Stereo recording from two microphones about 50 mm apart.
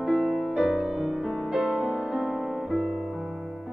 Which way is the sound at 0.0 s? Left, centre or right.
Centre.